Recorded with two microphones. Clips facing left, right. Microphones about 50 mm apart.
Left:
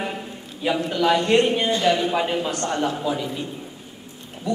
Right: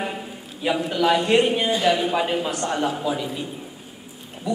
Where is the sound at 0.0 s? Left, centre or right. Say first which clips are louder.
Even; centre.